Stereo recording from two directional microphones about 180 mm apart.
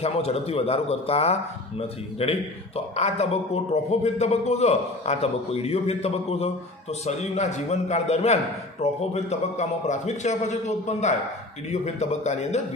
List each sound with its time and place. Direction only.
0.0 s a man's voice: 35° left (ahead or behind)